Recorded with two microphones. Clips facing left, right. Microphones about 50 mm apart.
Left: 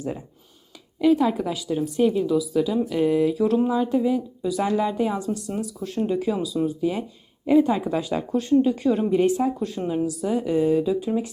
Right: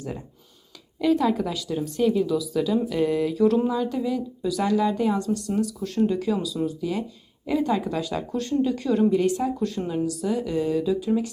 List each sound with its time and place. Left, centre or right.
1.0 s speech: centre
9.6 s speech: centre